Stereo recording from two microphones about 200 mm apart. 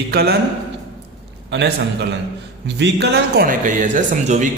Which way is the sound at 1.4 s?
60° right (ahead or behind).